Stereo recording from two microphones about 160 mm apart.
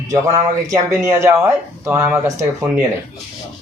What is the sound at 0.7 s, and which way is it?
Speech, 20° right (ahead or behind).